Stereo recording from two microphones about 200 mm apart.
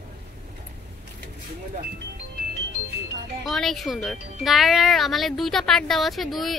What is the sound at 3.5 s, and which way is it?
Speech, centre (ahead or behind).